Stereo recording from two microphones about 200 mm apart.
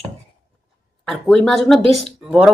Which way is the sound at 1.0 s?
Centre (ahead or behind).